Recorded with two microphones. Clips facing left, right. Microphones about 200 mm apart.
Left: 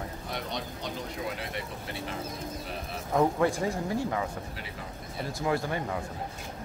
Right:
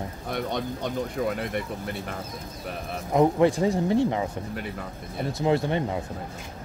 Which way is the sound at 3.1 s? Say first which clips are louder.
Right 5 dB; 20° right (ahead or behind).